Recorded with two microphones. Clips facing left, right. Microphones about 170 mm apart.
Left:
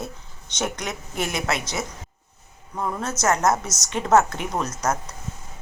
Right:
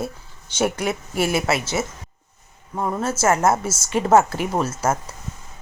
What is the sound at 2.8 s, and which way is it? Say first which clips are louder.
Speech: right 3 dB; 20° right (ahead or behind).